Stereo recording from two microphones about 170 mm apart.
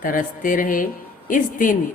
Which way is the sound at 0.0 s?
55° left (ahead or behind).